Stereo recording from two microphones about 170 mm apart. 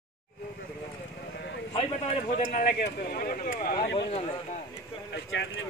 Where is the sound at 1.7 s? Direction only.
40° left (ahead or behind).